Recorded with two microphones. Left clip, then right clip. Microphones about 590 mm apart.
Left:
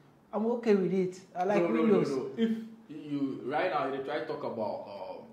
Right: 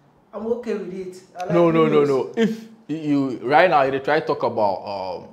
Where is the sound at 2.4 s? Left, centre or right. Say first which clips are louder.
Right 11 dB; right.